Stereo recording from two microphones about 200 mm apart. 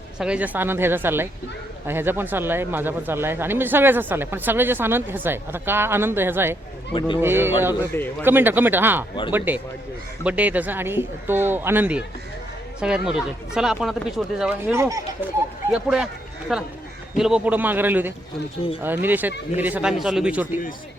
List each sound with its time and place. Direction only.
0.2 s speech: 5° right (ahead or behind)
14.7 s speech: 15° right (ahead or behind)
15.7 s speech: centre (ahead or behind)